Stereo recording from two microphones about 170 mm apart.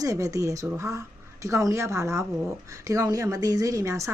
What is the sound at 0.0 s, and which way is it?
Speech, 20° right (ahead or behind).